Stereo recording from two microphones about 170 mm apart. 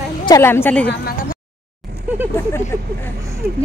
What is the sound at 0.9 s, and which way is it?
Speech, 60° left (ahead or behind).